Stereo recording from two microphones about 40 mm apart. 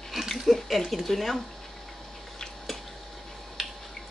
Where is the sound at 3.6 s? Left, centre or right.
Centre.